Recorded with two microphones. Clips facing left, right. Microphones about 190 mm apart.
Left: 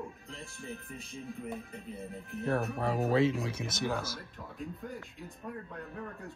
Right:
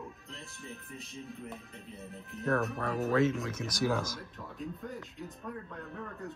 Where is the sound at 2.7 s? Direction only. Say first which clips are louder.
Left 1 dB; 30° left (ahead or behind).